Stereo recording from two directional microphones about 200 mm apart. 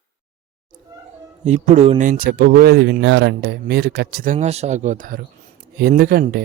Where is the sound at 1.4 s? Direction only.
35° right (ahead or behind).